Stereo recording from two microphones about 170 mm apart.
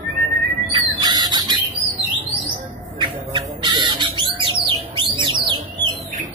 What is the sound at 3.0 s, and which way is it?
Bird, 25° right (ahead or behind).